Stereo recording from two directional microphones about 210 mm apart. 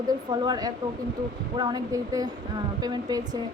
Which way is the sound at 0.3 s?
20° right (ahead or behind).